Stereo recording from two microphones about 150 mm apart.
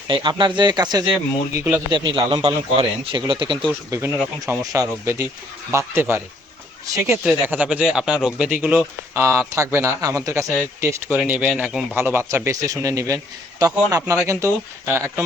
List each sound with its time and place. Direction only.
0.1 s a man's voice: 30° right (ahead or behind)
3.9 s speech: 20° right (ahead or behind)